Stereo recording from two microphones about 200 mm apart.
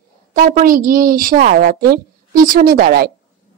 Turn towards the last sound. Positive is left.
turn(degrees=-50)  # may be behind; listen again after turning